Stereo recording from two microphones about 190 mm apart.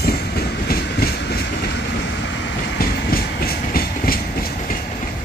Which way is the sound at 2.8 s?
50° left (ahead or behind).